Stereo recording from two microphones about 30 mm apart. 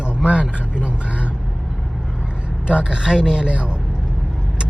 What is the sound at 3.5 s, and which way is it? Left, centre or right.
Speech, right.